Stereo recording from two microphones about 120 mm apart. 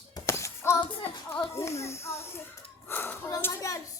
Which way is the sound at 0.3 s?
25° left (ahead or behind).